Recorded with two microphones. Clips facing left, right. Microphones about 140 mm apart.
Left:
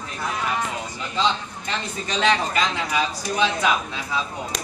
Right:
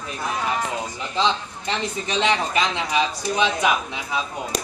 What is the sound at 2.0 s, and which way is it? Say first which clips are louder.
A man's voice: left 1 dB; 20° right (ahead or behind).